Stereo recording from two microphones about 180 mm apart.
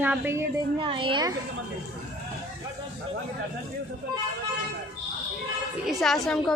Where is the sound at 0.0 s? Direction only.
10° right (ahead or behind).